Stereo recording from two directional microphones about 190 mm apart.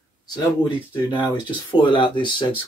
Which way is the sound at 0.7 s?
25° left (ahead or behind).